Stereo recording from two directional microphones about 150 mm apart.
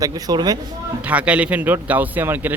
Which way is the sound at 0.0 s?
25° right (ahead or behind).